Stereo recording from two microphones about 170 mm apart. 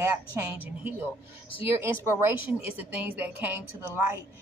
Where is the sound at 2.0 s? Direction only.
15° right (ahead or behind).